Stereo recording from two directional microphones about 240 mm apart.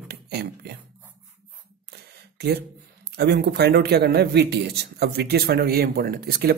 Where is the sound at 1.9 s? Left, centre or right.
Right.